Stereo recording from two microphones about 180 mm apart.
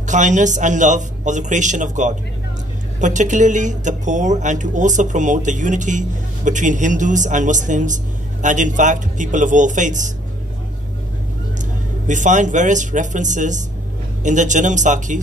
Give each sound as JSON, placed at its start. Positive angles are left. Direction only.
{"t": 0.0, "sound": "speech", "side_deg": -45}
{"t": 12.1, "sound": "speech", "side_deg": -45}